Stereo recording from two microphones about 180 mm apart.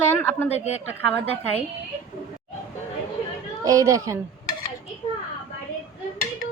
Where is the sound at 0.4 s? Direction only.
35° left (ahead or behind).